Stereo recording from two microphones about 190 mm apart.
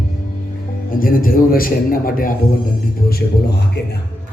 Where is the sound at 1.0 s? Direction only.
50° left (ahead or behind).